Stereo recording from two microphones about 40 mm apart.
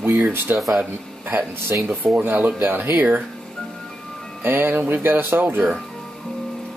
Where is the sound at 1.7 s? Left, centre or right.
Right.